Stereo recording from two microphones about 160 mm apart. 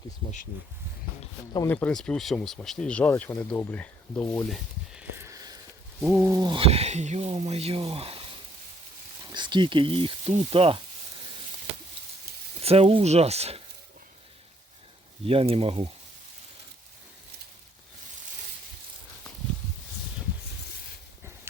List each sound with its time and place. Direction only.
1.6 s speech: 10° left (ahead or behind)
5.1 s whispering: 20° right (ahead or behind)
6.0 s a sound: 10° right (ahead or behind)
6.3 s speech: 30° right (ahead or behind)
12.6 s speech: 35° right (ahead or behind)
15.2 s speech: 35° right (ahead or behind)